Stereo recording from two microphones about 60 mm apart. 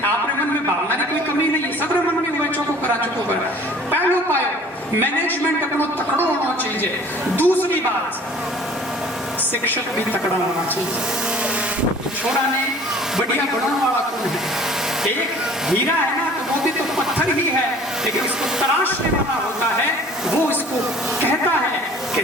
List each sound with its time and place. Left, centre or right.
7.3 s a man's voice: left